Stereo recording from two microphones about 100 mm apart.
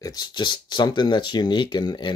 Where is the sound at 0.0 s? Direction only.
45° left (ahead or behind).